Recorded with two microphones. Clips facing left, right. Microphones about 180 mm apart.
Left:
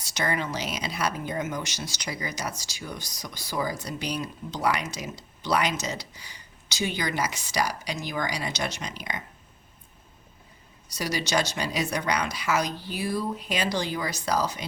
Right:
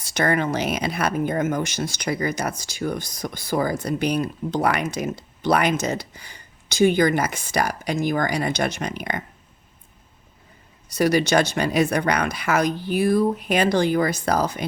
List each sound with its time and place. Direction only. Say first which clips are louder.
0.0 s speech: right 7 dB; 55° right (ahead or behind)
10.8 s speech: right 11 dB; 55° right (ahead or behind)